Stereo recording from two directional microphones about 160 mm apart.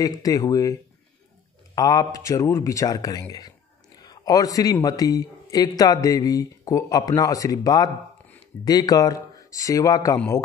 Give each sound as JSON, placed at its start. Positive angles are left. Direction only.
{"t": 0.0, "sound": "a man's voice", "side_deg": 20}
{"t": 1.8, "sound": "a man's voice", "side_deg": 25}